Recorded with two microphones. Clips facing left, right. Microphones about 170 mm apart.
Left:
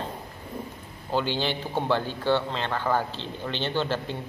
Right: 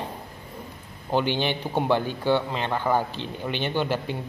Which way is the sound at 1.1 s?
15° right (ahead or behind).